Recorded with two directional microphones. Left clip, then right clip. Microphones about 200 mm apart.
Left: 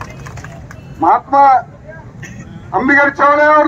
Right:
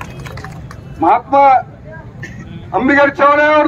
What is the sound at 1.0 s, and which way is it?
Speech, 20° right (ahead or behind).